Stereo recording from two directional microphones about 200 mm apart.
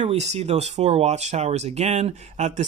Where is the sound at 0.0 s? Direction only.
30° right (ahead or behind).